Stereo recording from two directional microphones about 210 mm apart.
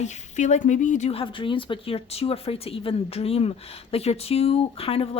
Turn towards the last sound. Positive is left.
turn(degrees=25)  # may be behind; listen again after turning